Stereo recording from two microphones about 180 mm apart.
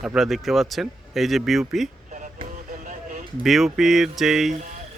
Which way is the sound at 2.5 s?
45° right (ahead or behind).